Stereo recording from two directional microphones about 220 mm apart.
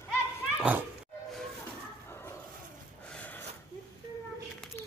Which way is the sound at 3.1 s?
5° left (ahead or behind).